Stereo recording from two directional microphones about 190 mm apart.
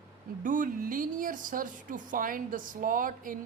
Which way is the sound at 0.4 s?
45° right (ahead or behind).